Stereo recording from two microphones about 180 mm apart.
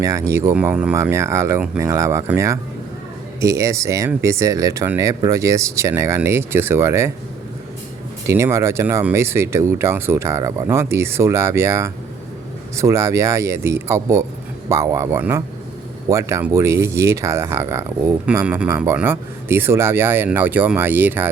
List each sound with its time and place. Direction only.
0.0 s speech: 15° right (ahead or behind)
8.3 s speech: 15° right (ahead or behind)